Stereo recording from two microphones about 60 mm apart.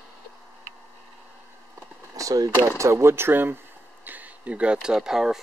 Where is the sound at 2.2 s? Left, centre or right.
Right.